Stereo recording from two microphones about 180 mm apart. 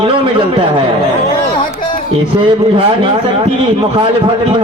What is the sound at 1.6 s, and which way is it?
Music, 40° left (ahead or behind).